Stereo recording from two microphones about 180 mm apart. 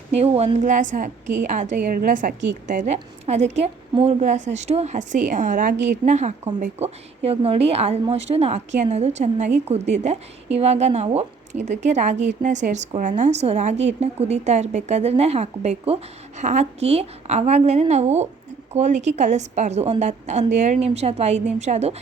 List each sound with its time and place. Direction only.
0.1 s a woman's voice: 35° right (ahead or behind)